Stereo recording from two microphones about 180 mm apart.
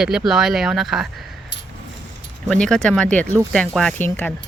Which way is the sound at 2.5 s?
5° left (ahead or behind).